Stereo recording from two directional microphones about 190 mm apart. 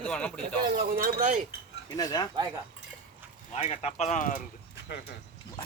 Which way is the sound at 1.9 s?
20° left (ahead or behind).